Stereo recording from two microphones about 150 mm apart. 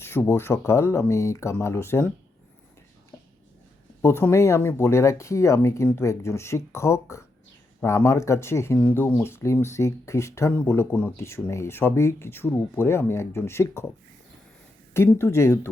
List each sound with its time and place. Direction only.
0.0 s speech: 15° left (ahead or behind)
4.0 s speech: 15° left (ahead or behind)
14.9 s speech: 15° left (ahead or behind)